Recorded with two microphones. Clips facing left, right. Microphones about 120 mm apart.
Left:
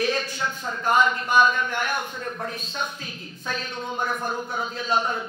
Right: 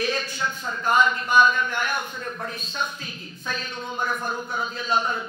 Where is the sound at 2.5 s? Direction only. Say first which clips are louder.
Right 1 dB; 55° left (ahead or behind).